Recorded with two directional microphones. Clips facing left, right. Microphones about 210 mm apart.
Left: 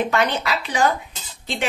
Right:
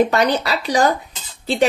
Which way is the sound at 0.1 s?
35° right (ahead or behind).